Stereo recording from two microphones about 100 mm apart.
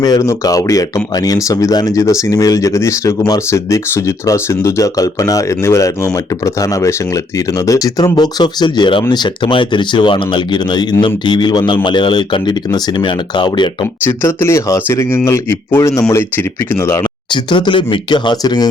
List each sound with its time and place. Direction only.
0.0 s speech: 35° left (ahead or behind)
14.0 s speech: 25° left (ahead or behind)
17.0 s speech: 55° left (ahead or behind)